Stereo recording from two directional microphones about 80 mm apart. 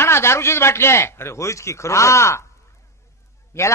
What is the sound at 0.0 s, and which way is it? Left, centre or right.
A man's voice, left.